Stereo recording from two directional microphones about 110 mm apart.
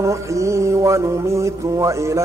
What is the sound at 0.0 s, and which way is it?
Mantra, 30° right (ahead or behind).